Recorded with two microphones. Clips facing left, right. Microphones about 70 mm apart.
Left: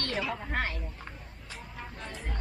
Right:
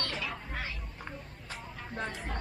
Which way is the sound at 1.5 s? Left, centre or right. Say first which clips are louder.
Right 1 dB; right.